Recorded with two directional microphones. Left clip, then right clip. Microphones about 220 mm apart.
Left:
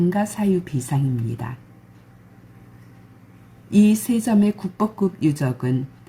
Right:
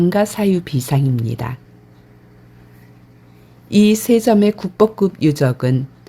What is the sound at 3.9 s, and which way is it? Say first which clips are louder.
Speech: right 9 dB; 50° right (ahead or behind).